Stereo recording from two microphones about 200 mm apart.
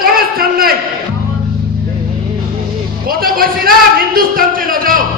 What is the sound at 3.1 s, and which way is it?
A man's voice, 45° right (ahead or behind).